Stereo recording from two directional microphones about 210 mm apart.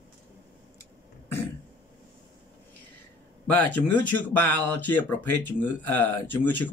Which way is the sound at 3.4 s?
10° left (ahead or behind).